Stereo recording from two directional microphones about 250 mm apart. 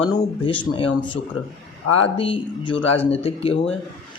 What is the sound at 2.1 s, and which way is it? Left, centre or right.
Speech, left.